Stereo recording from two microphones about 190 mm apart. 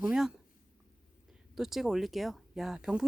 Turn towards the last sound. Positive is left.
turn(degrees=-5)  # may be behind; listen again after turning